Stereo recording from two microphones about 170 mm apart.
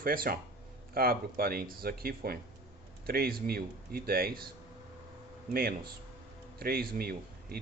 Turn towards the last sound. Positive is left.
turn(degrees=-60)  # may be behind; listen again after turning